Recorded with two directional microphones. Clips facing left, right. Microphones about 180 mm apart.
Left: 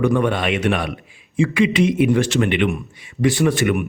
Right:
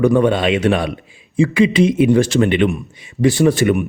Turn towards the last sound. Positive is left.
turn(degrees=-30)  # may be behind; listen again after turning